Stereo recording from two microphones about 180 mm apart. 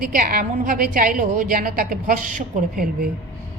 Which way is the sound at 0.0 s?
55° right (ahead or behind).